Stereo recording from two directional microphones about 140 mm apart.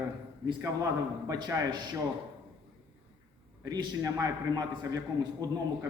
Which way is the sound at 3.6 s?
25° right (ahead or behind).